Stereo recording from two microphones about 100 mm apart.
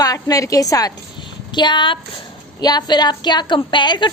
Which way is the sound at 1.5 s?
50° left (ahead or behind).